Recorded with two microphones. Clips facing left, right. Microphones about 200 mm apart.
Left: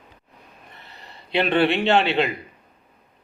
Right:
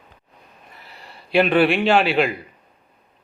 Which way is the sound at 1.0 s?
25° left (ahead or behind).